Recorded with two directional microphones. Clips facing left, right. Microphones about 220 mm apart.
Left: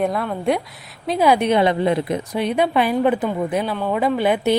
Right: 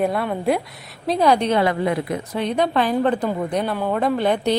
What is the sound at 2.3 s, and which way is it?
A woman's voice, 10° left (ahead or behind).